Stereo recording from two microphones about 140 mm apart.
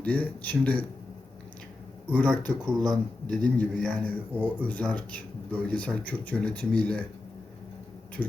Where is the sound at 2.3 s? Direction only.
30° right (ahead or behind).